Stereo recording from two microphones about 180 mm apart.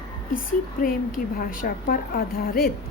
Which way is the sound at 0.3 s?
50° left (ahead or behind).